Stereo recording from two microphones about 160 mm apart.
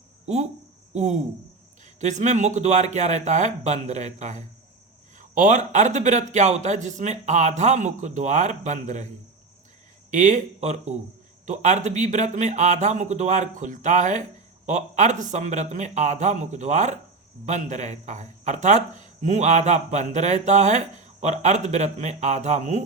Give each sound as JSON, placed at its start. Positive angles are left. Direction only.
{"t": 0.9, "sound": "a man's voice", "side_deg": -50}
{"t": 10.1, "sound": "a man's voice", "side_deg": -50}